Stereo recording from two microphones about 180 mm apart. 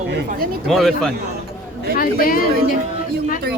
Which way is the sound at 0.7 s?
Centre (ahead or behind).